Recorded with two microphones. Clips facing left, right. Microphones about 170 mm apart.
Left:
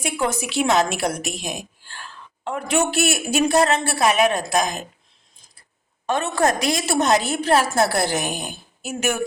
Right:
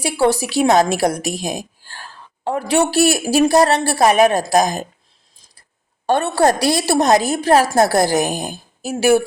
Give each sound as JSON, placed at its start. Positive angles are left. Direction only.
{"t": 0.0, "sound": "a woman's voice", "side_deg": -35}
{"t": 6.3, "sound": "a woman's voice", "side_deg": -35}